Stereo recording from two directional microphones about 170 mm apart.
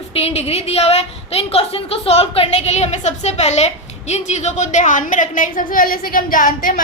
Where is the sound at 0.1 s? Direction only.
35° left (ahead or behind).